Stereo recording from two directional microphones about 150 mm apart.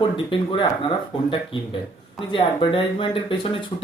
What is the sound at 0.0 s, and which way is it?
Speech, 35° left (ahead or behind).